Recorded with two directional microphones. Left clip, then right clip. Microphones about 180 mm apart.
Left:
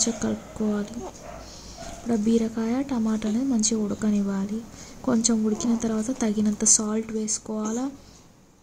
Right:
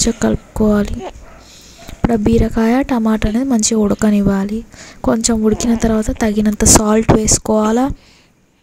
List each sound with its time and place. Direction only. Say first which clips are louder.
0.0 s speech: right 11 dB; 55° right (ahead or behind)
2.1 s speech: right 9 dB; 55° right (ahead or behind)